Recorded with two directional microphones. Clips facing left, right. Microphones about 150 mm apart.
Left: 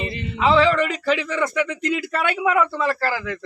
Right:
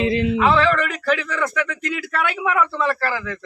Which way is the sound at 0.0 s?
90° right.